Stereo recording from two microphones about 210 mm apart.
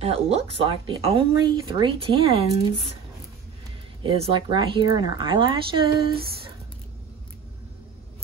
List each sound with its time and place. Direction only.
0.0 s speech: 25° right (ahead or behind)
4.0 s speech: 25° right (ahead or behind)